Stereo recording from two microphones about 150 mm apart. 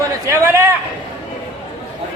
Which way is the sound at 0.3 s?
20° right (ahead or behind).